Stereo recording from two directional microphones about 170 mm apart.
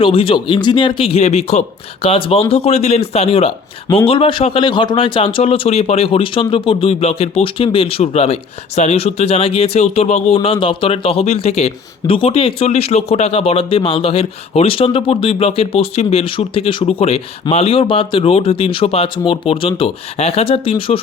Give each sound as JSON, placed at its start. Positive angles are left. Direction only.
{"t": 0.0, "sound": "a man's voice", "side_deg": 30}